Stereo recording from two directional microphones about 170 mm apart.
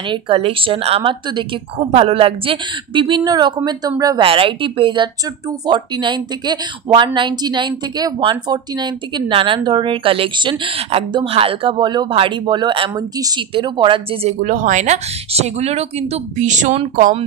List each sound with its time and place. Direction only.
0.1 s speech: 35° right (ahead or behind)
14.4 s speech: 50° right (ahead or behind)